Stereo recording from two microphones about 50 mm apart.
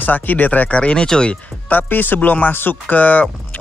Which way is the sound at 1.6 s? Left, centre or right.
Left.